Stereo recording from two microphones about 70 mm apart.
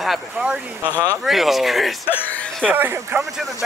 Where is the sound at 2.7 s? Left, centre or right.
Right.